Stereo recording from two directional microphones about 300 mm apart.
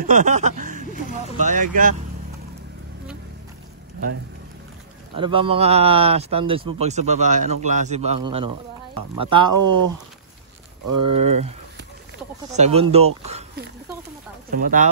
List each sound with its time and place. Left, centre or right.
0.1 s chuckle: right
1.4 s speech: right
5.1 s speech: centre
9.6 s speech: right
12.5 s speech: right
14.5 s speech: right